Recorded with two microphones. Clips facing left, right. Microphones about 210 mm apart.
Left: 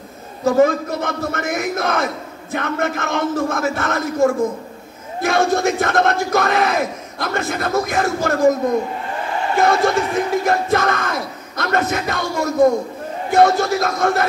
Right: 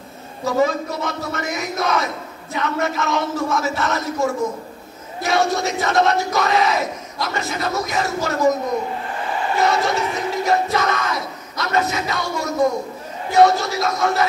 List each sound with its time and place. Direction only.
0.5 s speech: 50° left (ahead or behind)
9.6 s speech: 50° left (ahead or behind)